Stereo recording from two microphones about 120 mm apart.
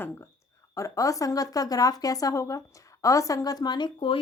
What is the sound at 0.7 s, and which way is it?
Speech, 25° left (ahead or behind).